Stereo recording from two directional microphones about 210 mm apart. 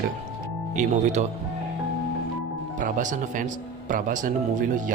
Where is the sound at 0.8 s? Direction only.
35° right (ahead or behind).